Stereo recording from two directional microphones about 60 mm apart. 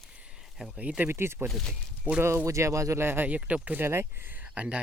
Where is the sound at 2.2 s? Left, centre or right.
Right.